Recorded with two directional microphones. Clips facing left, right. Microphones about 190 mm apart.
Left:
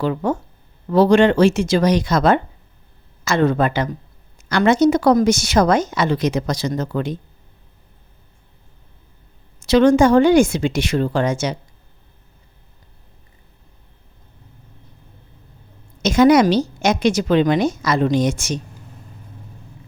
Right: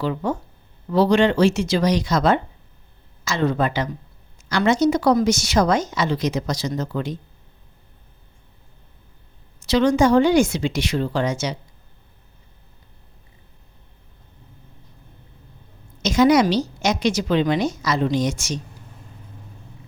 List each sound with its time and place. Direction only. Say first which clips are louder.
0.0 s a woman's voice: left 3 dB; 50° left (ahead or behind)
9.6 s a woman's voice: left 4 dB; 50° left (ahead or behind)
16.0 s a woman's voice: left 3 dB; 55° left (ahead or behind)